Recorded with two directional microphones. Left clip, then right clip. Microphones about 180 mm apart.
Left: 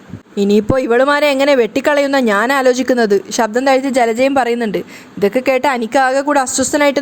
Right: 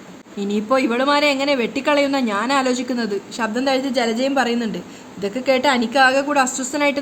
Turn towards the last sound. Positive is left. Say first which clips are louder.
# left 7 dB
turn(degrees=40)  # may be behind; listen again after turning